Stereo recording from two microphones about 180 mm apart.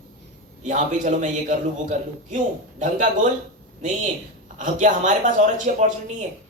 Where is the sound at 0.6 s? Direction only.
45° right (ahead or behind).